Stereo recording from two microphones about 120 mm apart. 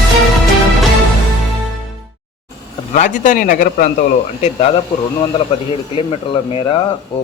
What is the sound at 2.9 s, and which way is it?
A man's voice, 90° left.